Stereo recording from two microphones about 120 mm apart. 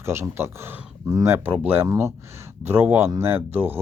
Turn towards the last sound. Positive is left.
turn(degrees=-15)  # may be behind; listen again after turning